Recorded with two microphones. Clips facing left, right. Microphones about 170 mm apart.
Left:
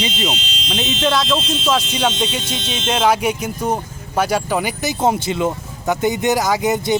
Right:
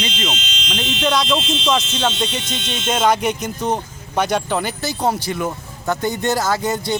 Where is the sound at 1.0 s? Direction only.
Centre (ahead or behind).